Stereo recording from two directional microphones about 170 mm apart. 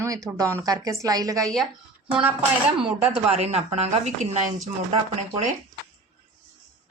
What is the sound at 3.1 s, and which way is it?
Speech, 35° right (ahead or behind).